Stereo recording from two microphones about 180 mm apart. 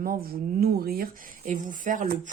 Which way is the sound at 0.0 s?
55° right (ahead or behind).